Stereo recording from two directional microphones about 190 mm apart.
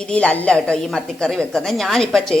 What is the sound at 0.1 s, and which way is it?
Speech, 5° left (ahead or behind).